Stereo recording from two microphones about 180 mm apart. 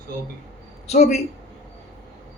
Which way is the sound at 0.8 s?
35° left (ahead or behind).